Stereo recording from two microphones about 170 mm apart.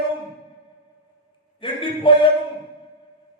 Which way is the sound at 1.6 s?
30° left (ahead or behind).